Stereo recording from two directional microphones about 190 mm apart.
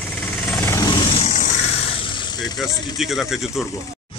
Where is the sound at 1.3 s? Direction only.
40° left (ahead or behind).